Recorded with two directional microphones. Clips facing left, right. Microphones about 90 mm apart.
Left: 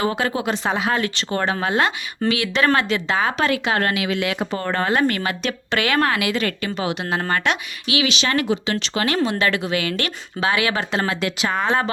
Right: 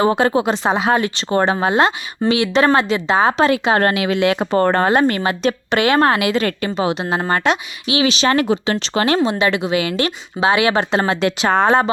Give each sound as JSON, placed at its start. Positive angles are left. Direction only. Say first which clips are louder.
{"t": 0.0, "sound": "a woman's voice", "louder": "right 7 dB", "side_deg": -30}
{"t": 4.5, "sound": "speech", "louder": "right 10 dB", "side_deg": -45}
{"t": 4.9, "sound": "a woman's voice", "louder": "right 4 dB", "side_deg": -30}